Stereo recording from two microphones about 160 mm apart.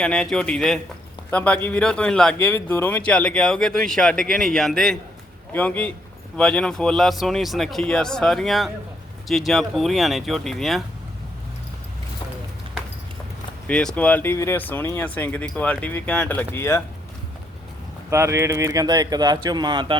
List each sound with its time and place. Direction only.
0.0 s speech: 5° left (ahead or behind)
13.7 s speech: 5° left (ahead or behind)
18.1 s speech: 15° right (ahead or behind)